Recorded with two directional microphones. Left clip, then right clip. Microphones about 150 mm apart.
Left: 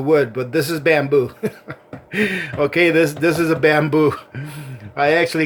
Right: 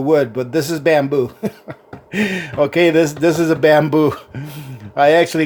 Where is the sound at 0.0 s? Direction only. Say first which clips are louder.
Right 1 dB; 45° right (ahead or behind).